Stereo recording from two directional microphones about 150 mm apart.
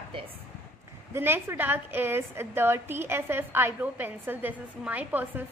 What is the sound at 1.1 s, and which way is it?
A woman's voice, 15° right (ahead or behind).